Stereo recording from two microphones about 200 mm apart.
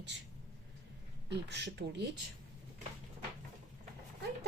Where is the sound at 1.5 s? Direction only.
60° right (ahead or behind).